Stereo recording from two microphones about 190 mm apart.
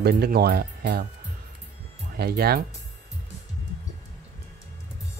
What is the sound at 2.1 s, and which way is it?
Speech, 55° right (ahead or behind).